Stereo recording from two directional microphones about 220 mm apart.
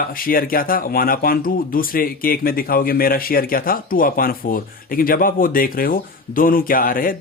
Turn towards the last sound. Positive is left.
turn(degrees=40)  # may be behind; listen again after turning